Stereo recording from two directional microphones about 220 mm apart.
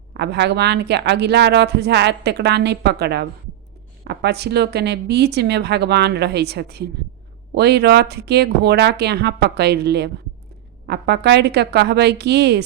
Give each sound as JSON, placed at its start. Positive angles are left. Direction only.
{"t": 0.1, "sound": "speech", "side_deg": -50}